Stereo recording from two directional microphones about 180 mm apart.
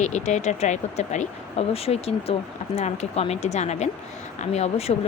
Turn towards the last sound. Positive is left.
turn(degrees=35)  # may be behind; listen again after turning